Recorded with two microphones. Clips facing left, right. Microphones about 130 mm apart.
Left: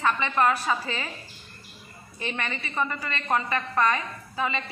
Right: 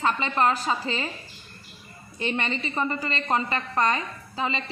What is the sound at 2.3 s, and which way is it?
A woman's voice, 25° right (ahead or behind).